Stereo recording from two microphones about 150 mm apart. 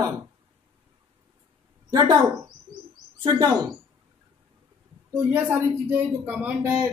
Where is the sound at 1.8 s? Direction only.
25° right (ahead or behind).